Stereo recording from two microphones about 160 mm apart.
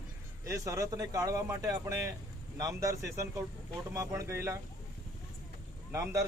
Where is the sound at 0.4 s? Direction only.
20° right (ahead or behind).